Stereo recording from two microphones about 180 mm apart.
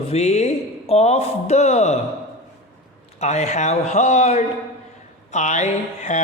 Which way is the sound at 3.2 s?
40° left (ahead or behind).